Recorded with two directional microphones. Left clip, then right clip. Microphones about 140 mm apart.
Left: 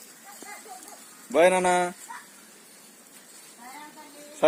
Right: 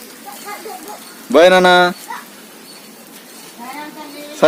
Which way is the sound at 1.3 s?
15° right (ahead or behind).